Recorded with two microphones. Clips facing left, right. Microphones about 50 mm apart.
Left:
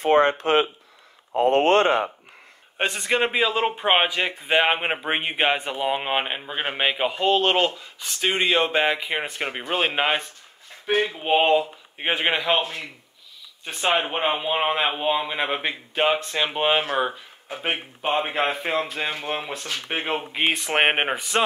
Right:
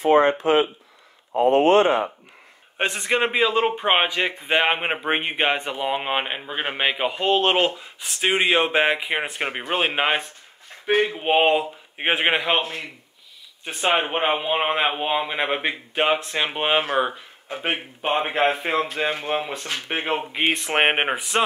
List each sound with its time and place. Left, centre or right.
0.0 s speech: left
2.8 s a man's voice: centre
14.0 s a man's voice: centre